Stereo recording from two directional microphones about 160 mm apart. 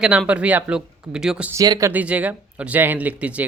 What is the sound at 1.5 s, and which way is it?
Speech, 20° right (ahead or behind).